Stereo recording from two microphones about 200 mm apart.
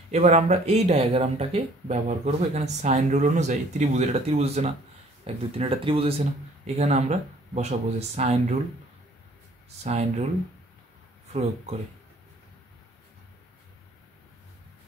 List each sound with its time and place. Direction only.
0.1 s speech: 35° right (ahead or behind)
9.8 s speech: 30° right (ahead or behind)
11.3 s speech: 30° right (ahead or behind)